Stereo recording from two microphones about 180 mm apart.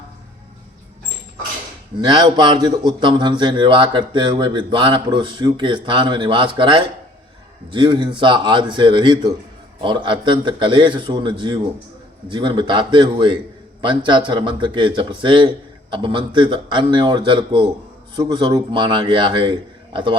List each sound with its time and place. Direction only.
2.0 s speech: 25° right (ahead or behind)